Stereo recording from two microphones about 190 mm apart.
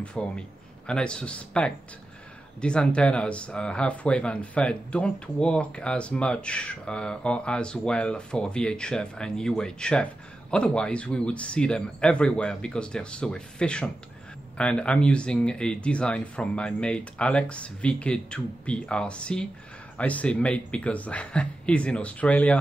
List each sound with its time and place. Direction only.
0.0 s a man's voice: 5° left (ahead or behind)